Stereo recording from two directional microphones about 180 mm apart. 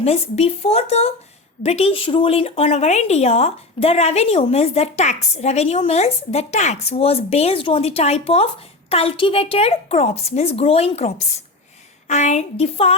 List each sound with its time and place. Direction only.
0.0 s speech: 35° left (ahead or behind)